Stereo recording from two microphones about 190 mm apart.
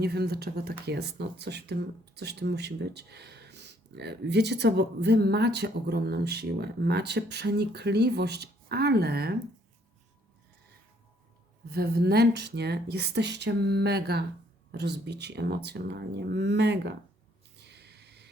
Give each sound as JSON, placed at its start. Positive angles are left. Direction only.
{"t": 0.0, "sound": "speech", "side_deg": -55}
{"t": 11.6, "sound": "speech", "side_deg": -55}
{"t": 17.7, "sound": "a sound", "side_deg": -60}